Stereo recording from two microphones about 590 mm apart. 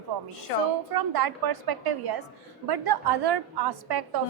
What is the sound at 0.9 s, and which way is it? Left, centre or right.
A woman's voice, right.